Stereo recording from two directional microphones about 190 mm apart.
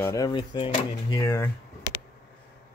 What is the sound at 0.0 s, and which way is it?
Speech, 15° left (ahead or behind).